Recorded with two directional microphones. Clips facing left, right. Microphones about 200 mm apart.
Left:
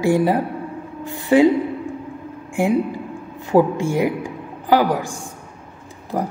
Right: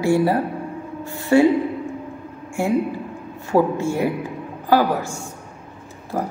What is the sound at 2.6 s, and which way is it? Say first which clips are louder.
A woman's voice: left 2 dB; 15° left (ahead or behind).